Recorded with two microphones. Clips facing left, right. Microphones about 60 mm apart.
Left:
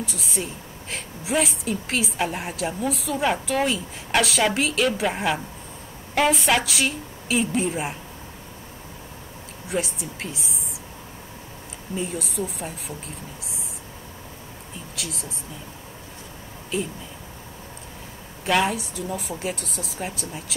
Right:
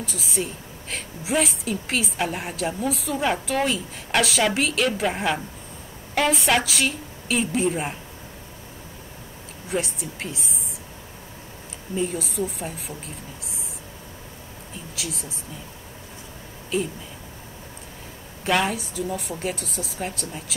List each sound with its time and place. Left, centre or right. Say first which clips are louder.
0.0 s a woman's voice: right 1 dB; centre
9.7 s a woman's voice: even; centre
12.0 s a woman's voice: right 3 dB; centre
15.0 s a woman's voice: right 1 dB; centre
16.7 s a woman's voice: right 2 dB; centre
18.4 s a woman's voice: left 1 dB; centre